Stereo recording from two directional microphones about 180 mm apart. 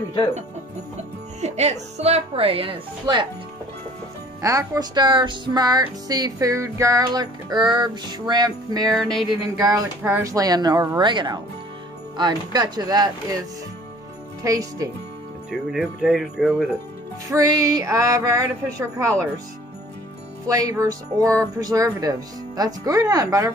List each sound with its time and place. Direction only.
1.4 s speech: 40° right (ahead or behind)
4.4 s music: 20° right (ahead or behind)
8.9 s speech: centre (ahead or behind)
9.4 s music: 20° right (ahead or behind)
14.4 s music: 20° right (ahead or behind)
15.5 s speech: centre (ahead or behind)
17.3 s music: 20° right (ahead or behind)
20.4 s music: 20° right (ahead or behind)